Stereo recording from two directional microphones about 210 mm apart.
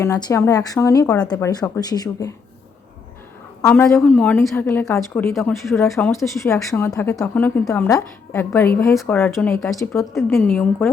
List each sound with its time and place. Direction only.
0.0 s a woman's voice: 15° left (ahead or behind)
3.7 s a woman's voice: 5° left (ahead or behind)
10.0 s a woman's voice: centre (ahead or behind)